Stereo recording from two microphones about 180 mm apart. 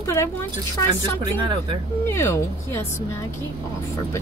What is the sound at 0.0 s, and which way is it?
Speech, 15° left (ahead or behind).